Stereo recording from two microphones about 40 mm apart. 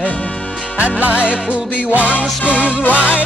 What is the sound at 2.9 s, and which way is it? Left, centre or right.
Music, right.